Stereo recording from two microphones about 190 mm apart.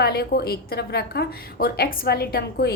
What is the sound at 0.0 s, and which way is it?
A woman's voice, 55° left (ahead or behind).